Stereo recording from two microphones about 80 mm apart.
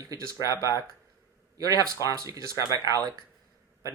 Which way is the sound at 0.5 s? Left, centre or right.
Left.